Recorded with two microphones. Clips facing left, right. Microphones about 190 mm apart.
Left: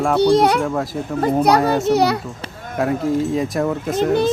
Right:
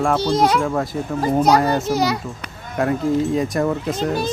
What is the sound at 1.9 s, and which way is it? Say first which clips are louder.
Speech: left 4 dB; 60° left (ahead or behind).